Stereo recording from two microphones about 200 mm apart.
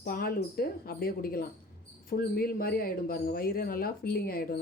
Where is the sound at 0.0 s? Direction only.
45° left (ahead or behind).